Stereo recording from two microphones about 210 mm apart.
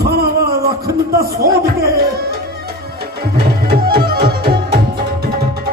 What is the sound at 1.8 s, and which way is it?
Music, 50° right (ahead or behind).